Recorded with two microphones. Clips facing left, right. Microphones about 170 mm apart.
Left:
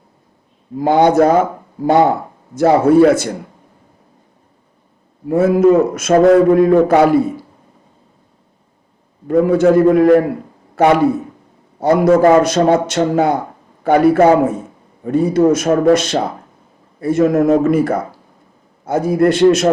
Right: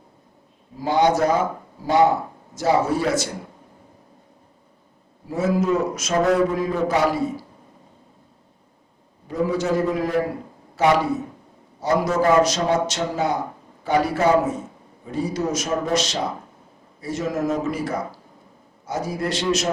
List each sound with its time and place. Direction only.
0.8 s a man's voice: 55° left (ahead or behind)
5.3 s a man's voice: 55° left (ahead or behind)
9.2 s a man's voice: 55° left (ahead or behind)